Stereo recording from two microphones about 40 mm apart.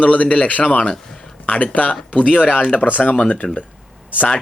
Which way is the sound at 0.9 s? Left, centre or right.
Centre.